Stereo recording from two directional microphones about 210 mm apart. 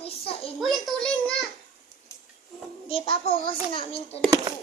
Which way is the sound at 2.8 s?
25° left (ahead or behind).